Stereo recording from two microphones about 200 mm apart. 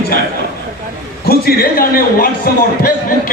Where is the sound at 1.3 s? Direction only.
45° left (ahead or behind).